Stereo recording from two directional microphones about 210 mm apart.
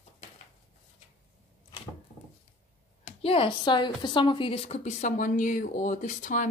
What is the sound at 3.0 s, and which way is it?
Speech, 25° left (ahead or behind).